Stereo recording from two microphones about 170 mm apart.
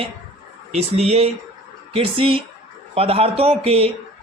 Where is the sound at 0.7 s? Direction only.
40° right (ahead or behind).